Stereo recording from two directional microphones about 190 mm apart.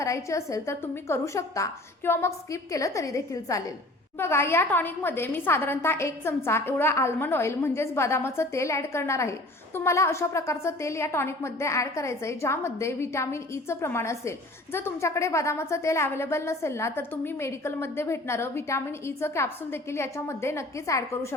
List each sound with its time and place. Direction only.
0.0 s a woman's voice: 15° left (ahead or behind)